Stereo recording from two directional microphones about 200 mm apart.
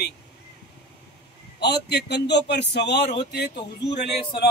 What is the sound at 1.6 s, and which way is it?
Speech, 55° left (ahead or behind).